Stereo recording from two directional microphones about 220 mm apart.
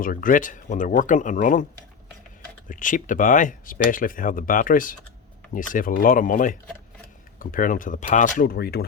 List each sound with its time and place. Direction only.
0.0 s speech: 40° left (ahead or behind)
2.6 s speech: 35° left (ahead or behind)